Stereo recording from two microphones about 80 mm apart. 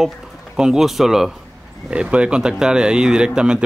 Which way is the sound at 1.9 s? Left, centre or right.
Centre.